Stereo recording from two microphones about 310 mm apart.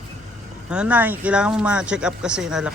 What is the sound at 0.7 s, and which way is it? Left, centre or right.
Speech, centre.